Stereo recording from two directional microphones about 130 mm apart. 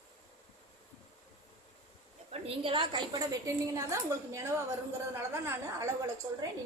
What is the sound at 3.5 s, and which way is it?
A woman's voice, 25° right (ahead or behind).